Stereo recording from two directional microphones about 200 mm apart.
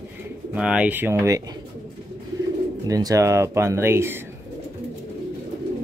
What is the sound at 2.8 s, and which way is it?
Speech, 15° right (ahead or behind).